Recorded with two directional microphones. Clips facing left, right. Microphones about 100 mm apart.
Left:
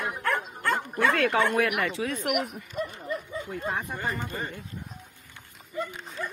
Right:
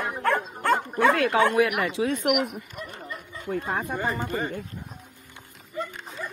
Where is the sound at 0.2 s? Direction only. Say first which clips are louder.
Right 6 dB; 30° right (ahead or behind).